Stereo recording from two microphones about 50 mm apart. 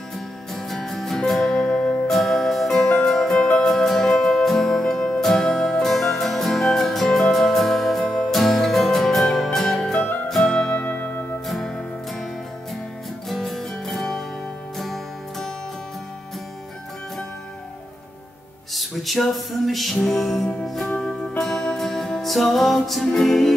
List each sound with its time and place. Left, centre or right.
0.6 s music: centre; by 3.6 s left
3.6 s music: centre
10.8 s music: left
11.4 s music: centre
13.3 s music: centre
18.8 s music: centre